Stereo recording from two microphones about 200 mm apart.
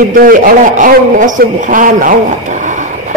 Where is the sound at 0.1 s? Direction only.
40° right (ahead or behind).